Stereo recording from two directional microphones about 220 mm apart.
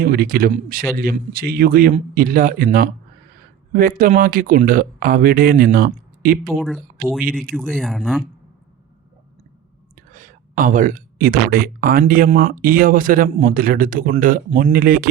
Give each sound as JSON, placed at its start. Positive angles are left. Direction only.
{"t": 0.0, "sound": "speech", "side_deg": -45}
{"t": 6.6, "sound": "speech", "side_deg": 5}
{"t": 10.1, "sound": "speech", "side_deg": -35}